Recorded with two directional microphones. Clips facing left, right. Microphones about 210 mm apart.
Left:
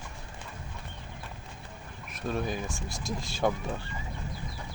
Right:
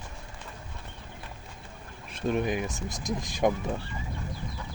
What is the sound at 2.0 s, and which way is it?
Speech, 25° right (ahead or behind).